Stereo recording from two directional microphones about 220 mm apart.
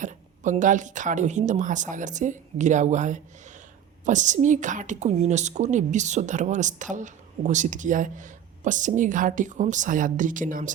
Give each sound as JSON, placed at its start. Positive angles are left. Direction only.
{"t": 0.0, "sound": "a woman's voice", "side_deg": -35}